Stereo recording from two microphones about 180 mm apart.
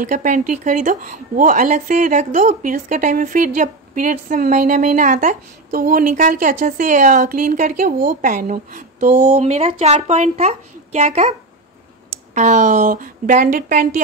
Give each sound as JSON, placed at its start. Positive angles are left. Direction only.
{"t": 0.0, "sound": "speech", "side_deg": -45}
{"t": 12.4, "sound": "speech", "side_deg": -45}